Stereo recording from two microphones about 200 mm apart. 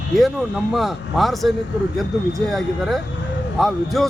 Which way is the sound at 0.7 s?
Centre (ahead or behind).